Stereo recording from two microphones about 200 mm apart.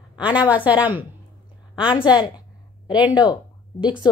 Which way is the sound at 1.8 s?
25° left (ahead or behind).